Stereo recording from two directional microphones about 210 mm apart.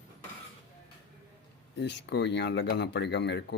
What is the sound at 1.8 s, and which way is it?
Speech, 55° left (ahead or behind).